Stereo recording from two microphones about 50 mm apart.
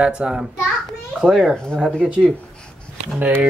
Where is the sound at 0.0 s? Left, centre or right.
Centre.